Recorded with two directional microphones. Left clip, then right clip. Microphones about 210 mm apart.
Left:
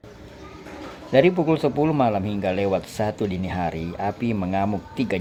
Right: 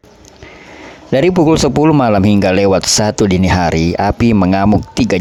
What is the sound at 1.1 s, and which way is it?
Speech, 55° right (ahead or behind).